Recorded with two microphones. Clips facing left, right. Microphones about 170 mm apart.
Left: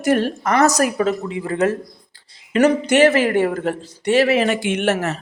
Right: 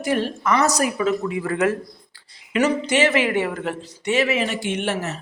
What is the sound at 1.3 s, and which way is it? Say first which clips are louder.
Speech: left 2 dB; 25° left (ahead or behind).